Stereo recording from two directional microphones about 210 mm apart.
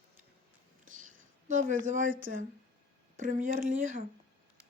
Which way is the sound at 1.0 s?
40° right (ahead or behind).